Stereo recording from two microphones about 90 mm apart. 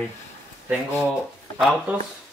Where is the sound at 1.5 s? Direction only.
Centre (ahead or behind).